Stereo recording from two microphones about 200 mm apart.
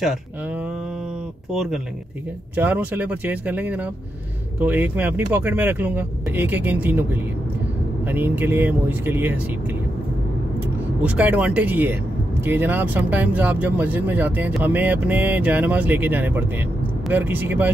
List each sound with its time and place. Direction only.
0.0 s speech: 5° right (ahead or behind)
11.0 s speech: 5° right (ahead or behind)